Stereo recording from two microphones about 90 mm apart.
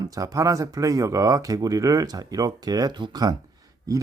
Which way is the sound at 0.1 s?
40° right (ahead or behind).